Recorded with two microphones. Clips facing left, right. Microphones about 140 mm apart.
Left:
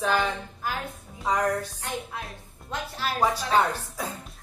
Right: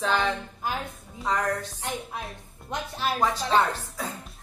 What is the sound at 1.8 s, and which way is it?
Speech, 20° right (ahead or behind).